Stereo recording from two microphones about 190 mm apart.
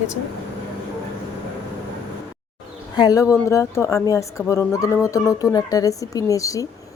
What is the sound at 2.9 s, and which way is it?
Speech, 20° left (ahead or behind).